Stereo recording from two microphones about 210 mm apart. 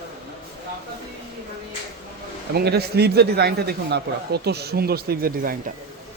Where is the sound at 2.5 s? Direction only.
50° right (ahead or behind).